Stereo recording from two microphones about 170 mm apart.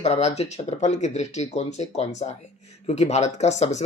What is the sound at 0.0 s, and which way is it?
Speech, 40° left (ahead or behind).